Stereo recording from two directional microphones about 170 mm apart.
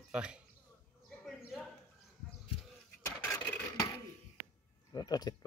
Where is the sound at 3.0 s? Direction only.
20° left (ahead or behind).